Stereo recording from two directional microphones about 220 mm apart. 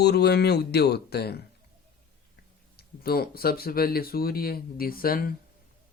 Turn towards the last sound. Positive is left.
turn(degrees=40)  # may be behind; listen again after turning